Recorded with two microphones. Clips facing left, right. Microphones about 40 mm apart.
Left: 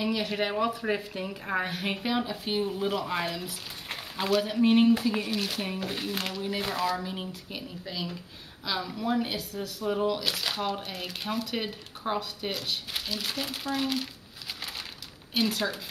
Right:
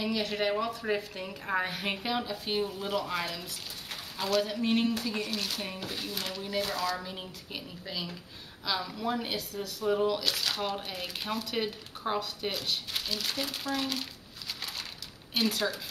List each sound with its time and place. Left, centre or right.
0.0 s a woman's voice: centre
2.6 s a woman's voice: centre
5.9 s speech: left
7.0 s speech: centre
15.3 s speech: centre